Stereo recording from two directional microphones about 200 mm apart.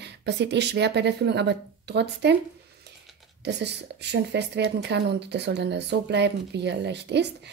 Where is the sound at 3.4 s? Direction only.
55° right (ahead or behind).